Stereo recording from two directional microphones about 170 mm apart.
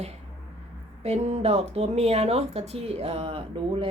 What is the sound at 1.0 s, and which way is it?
Speech, 40° right (ahead or behind).